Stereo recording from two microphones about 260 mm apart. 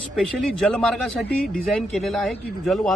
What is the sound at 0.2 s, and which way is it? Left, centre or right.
Speech, centre.